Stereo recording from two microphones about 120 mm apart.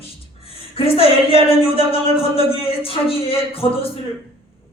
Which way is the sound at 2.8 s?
50° left (ahead or behind).